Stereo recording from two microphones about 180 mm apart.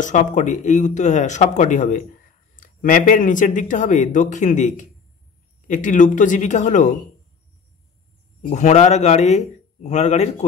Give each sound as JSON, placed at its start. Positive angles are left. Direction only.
{"t": 0.0, "sound": "speech", "side_deg": 45}
{"t": 8.4, "sound": "a man's voice", "side_deg": 40}